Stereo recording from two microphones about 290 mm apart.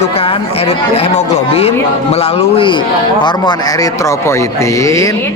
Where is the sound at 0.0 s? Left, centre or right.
Centre.